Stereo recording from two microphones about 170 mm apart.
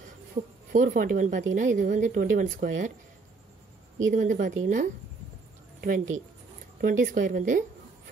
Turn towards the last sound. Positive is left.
turn(degrees=-50)  # may be behind; listen again after turning